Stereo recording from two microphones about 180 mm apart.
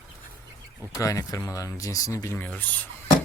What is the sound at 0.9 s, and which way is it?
Speech, 20° left (ahead or behind).